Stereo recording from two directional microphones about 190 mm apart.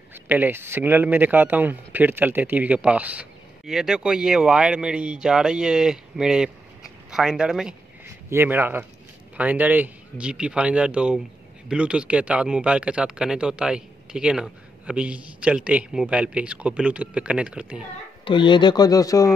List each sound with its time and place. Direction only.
0.1 s speech: 10° right (ahead or behind)
18.2 s speech: 25° left (ahead or behind)